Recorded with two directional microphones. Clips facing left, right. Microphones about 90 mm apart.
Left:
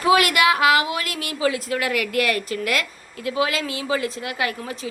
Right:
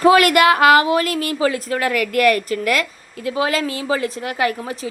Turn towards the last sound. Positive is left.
turn(degrees=-30)  # may be behind; listen again after turning